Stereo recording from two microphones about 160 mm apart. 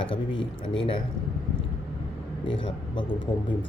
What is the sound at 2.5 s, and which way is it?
Speech, 30° left (ahead or behind).